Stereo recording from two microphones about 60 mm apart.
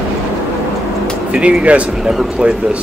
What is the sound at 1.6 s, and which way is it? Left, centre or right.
Speech, right.